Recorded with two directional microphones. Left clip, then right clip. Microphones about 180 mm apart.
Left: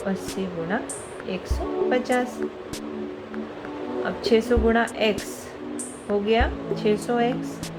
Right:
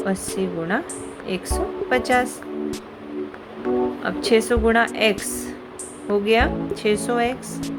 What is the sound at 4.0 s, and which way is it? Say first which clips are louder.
Speech: left 1 dB; 40° right (ahead or behind).